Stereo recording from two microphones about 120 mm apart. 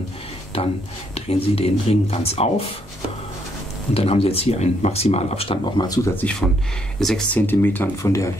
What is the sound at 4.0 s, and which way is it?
Speech, 55° left (ahead or behind).